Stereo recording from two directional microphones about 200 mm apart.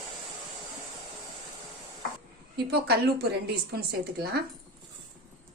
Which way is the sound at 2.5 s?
55° right (ahead or behind).